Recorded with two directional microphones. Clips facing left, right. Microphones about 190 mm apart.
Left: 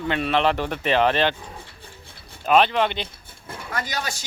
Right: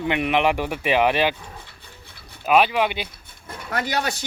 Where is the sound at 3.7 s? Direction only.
65° right (ahead or behind).